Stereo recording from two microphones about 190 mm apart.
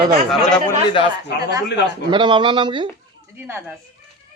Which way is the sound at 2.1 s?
25° right (ahead or behind).